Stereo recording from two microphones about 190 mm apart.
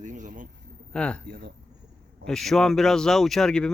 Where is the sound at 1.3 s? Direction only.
50° right (ahead or behind).